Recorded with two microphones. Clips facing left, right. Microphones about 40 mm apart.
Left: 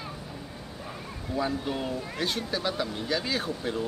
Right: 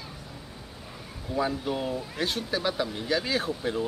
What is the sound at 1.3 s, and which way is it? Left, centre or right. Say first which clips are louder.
Speech: right 1 dB; centre.